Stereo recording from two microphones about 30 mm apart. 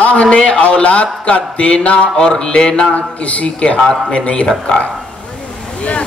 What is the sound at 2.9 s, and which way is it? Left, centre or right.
Speech, left.